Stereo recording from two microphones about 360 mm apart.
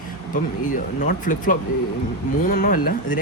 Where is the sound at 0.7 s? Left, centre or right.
Left.